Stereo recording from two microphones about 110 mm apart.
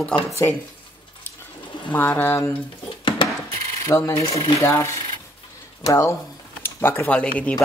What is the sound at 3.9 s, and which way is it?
Speech, 15° left (ahead or behind).